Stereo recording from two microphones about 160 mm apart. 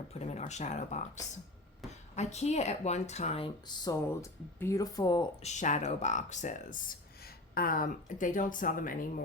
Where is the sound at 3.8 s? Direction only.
20° left (ahead or behind).